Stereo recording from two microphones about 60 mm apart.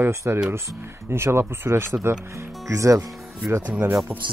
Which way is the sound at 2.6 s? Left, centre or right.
Right.